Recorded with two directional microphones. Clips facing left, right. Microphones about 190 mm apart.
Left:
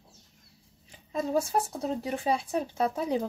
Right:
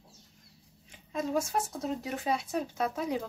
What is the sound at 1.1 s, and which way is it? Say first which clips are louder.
Speech: left 3 dB; 35° left (ahead or behind).